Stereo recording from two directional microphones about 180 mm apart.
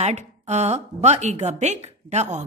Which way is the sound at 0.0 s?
40° right (ahead or behind).